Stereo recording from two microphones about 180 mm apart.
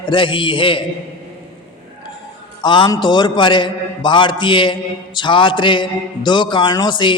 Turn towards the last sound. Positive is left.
turn(degrees=25)  # may be behind; listen again after turning